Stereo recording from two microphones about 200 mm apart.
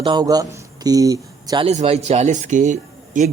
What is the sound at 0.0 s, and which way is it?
A man's voice, 20° right (ahead or behind).